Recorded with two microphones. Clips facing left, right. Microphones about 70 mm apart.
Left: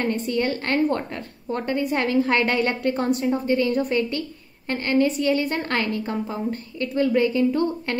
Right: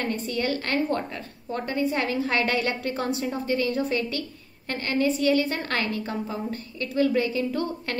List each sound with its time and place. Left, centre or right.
0.3 s a woman's voice: left
1.8 s a woman's voice: left